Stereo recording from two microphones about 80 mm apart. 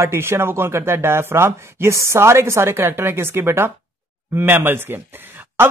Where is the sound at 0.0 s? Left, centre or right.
Right.